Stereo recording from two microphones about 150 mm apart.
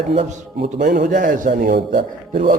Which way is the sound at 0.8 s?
65° right (ahead or behind).